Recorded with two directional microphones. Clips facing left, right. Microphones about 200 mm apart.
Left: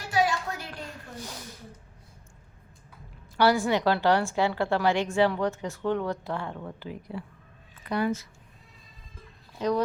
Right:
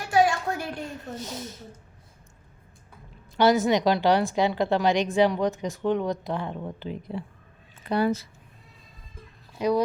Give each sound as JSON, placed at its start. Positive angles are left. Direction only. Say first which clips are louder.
{"t": 0.1, "sound": "a sound", "louder": "right 4 dB", "side_deg": -50}
{"t": 0.9, "sound": "speech", "louder": "right 5 dB", "side_deg": -20}
{"t": 3.3, "sound": "a woman's voice", "louder": "right 3 dB", "side_deg": -20}
{"t": 9.6, "sound": "speech", "louder": "right 3 dB", "side_deg": -10}